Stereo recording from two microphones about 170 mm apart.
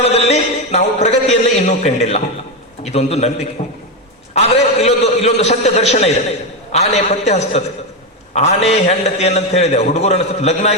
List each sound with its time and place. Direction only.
0.0 s a man's voice: 35° left (ahead or behind)